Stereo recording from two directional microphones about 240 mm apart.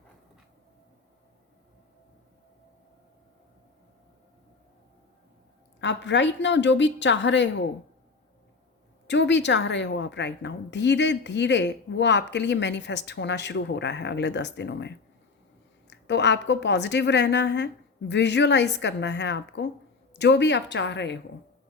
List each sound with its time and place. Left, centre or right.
5.8 s a woman's voice: left
9.0 s a woman's voice: left